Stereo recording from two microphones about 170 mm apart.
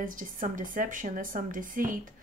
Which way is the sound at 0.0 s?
50° right (ahead or behind).